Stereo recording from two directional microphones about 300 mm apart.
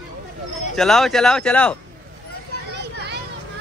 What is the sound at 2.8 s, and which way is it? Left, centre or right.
Children playing, right.